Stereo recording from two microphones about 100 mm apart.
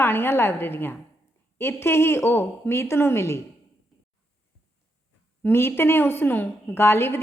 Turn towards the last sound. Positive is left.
turn(degrees=25)  # may be behind; listen again after turning